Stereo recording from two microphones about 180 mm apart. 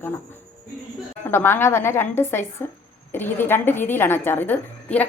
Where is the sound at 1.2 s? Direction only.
15° left (ahead or behind).